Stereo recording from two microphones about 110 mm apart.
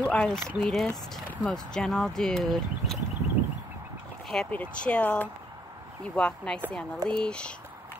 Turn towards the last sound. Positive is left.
turn(degrees=10)  # may be behind; listen again after turning